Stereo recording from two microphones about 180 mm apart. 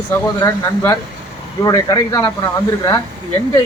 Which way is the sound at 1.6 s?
20° left (ahead or behind).